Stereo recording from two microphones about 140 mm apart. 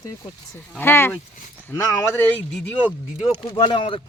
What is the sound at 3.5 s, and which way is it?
Speech, 35° left (ahead or behind).